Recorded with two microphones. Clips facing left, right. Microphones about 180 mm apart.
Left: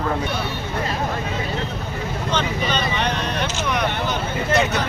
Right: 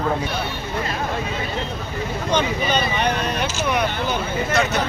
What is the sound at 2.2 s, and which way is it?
Speech, 10° right (ahead or behind).